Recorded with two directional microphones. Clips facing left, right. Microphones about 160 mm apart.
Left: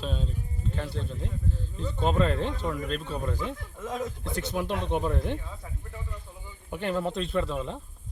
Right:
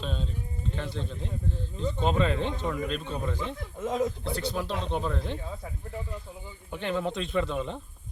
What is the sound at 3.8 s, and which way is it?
Speech, 20° right (ahead or behind).